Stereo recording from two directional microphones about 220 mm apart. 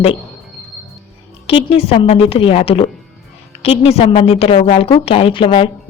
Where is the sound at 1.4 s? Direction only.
25° left (ahead or behind).